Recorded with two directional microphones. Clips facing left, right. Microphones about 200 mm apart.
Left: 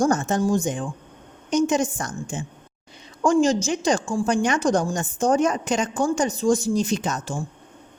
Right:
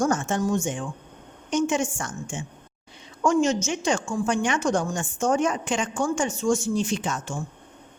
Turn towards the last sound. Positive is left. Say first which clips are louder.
# left 3 dB
turn(degrees=40)  # may be behind; listen again after turning